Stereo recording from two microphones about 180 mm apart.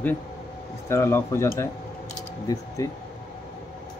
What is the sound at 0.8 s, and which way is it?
Speech, 15° left (ahead or behind).